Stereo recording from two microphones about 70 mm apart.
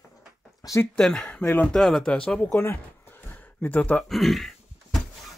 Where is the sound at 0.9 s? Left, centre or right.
Centre.